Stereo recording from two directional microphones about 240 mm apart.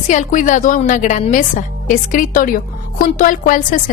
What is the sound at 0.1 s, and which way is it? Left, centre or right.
A woman's voice, left.